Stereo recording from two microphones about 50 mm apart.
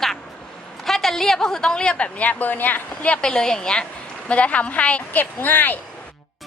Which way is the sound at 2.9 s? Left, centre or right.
Left.